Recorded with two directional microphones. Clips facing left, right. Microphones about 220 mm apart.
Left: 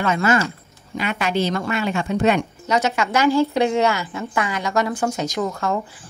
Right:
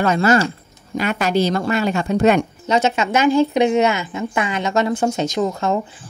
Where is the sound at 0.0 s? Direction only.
35° right (ahead or behind).